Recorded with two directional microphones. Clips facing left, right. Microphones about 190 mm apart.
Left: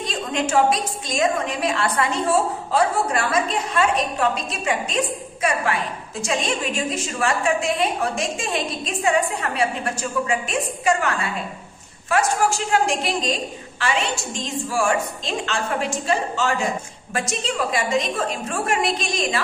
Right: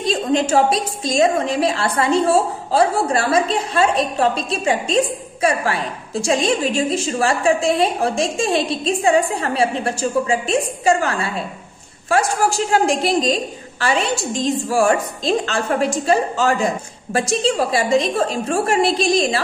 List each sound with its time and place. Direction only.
0.0 s a woman's voice: 35° right (ahead or behind)